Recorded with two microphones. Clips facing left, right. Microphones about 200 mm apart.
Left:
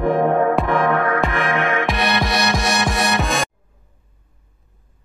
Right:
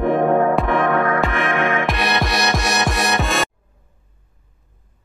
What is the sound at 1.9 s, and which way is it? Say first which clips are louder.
Music: left 1 dB; centre (ahead or behind).